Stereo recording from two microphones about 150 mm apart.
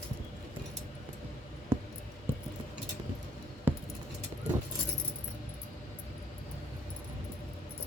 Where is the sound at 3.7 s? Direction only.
15° right (ahead or behind).